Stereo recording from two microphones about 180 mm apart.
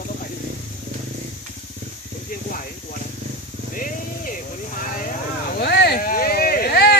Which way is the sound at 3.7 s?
50° left (ahead or behind).